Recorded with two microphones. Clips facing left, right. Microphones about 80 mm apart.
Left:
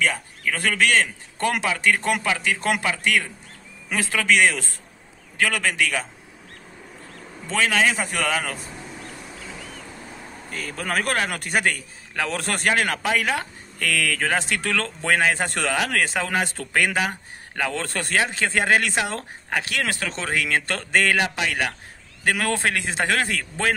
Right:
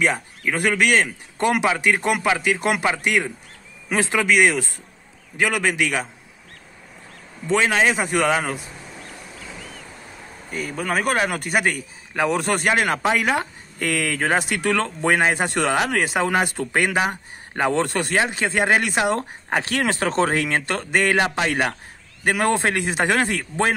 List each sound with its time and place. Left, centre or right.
0.5 s a man's voice: centre
4.3 s a man's voice: centre
7.4 s a man's voice: centre
10.5 s a man's voice: centre
12.6 s a man's voice: centre
15.4 s a man's voice: centre; by 17.8 s right
17.8 s a man's voice: centre
18.1 s a man's voice: centre
20.1 s speech: right
20.6 s a man's voice: centre
21.2 s speech: right
22.2 s a man's voice: centre